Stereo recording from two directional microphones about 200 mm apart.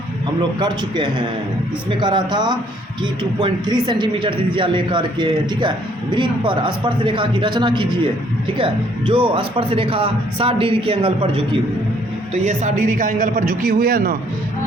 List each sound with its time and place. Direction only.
0.6 s speech: 20° right (ahead or behind)
12.3 s a man's voice: 35° right (ahead or behind)